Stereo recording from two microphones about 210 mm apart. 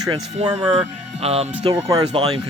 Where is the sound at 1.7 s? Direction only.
15° right (ahead or behind).